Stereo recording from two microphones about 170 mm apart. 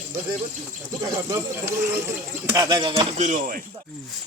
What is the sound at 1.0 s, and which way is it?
Speech, 15° right (ahead or behind).